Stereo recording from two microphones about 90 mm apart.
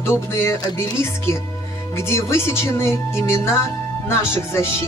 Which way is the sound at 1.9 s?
30° left (ahead or behind).